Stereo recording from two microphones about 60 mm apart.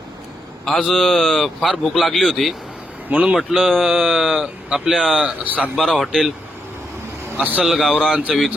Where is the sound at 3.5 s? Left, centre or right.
Centre.